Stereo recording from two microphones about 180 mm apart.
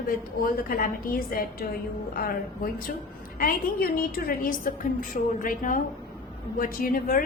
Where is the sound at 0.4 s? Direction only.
50° left (ahead or behind).